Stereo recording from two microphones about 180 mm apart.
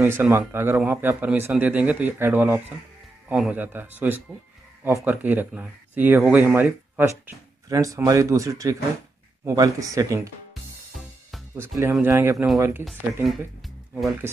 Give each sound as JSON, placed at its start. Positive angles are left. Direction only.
{"t": 0.0, "sound": "speech", "side_deg": -15}
{"t": 11.5, "sound": "speech", "side_deg": -15}
{"t": 12.8, "sound": "speech", "side_deg": 0}
{"t": 13.6, "sound": "music", "side_deg": 0}